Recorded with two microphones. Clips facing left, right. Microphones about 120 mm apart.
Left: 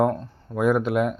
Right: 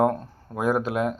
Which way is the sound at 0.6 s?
40° right (ahead or behind).